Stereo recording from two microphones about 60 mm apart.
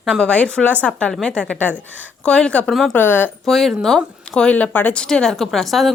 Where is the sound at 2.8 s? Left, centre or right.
Left.